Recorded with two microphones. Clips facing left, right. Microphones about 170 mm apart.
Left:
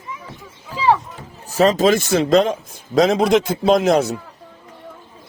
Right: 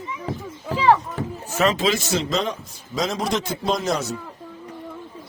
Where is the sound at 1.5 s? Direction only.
35° left (ahead or behind); by 4.1 s 55° left (ahead or behind).